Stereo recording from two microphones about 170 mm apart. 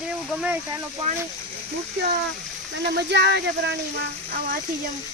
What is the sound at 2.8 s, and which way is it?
Speech, 80° right.